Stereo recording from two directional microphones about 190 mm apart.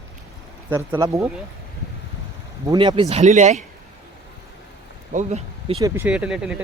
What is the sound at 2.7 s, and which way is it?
Speech, 25° right (ahead or behind).